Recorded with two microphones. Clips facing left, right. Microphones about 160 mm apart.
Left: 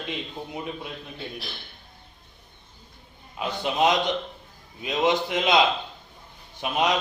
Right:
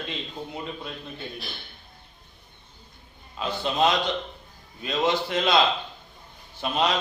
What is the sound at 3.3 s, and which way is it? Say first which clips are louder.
A man's voice: even; 15° left (ahead or behind).